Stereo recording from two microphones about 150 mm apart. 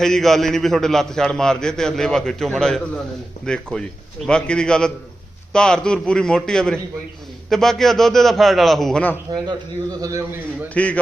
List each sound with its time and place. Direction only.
0.0 s a man's voice: centre (ahead or behind)
10.0 s a man's voice: 20° right (ahead or behind)